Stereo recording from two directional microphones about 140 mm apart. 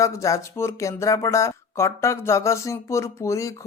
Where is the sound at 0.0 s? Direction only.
20° left (ahead or behind).